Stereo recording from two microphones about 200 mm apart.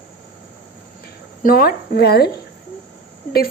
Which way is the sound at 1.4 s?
50° left (ahead or behind).